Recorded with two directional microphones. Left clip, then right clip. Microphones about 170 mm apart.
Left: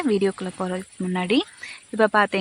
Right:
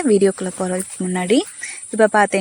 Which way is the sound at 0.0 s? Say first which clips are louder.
Right 7 dB; 25° right (ahead or behind).